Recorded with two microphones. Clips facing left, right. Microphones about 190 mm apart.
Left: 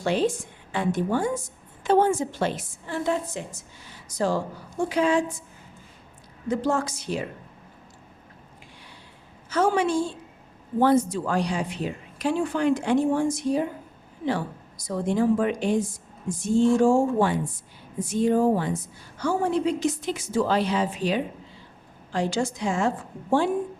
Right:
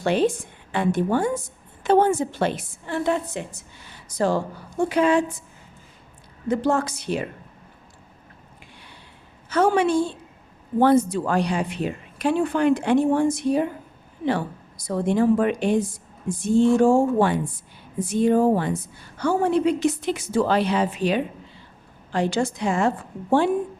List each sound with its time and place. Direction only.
0.0 s a woman's voice: 60° right (ahead or behind)
6.5 s a woman's voice: 60° right (ahead or behind)
9.5 s a woman's voice: 60° right (ahead or behind)